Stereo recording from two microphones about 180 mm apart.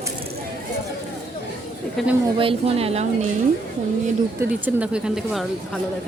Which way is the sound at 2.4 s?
30° right (ahead or behind).